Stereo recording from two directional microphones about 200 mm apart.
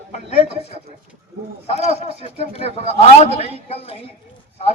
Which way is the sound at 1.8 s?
30° left (ahead or behind).